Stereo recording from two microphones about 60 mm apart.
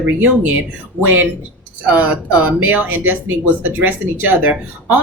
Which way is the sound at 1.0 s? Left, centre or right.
Right.